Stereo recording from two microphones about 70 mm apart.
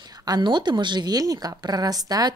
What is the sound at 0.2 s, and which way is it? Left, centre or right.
A woman's voice, right.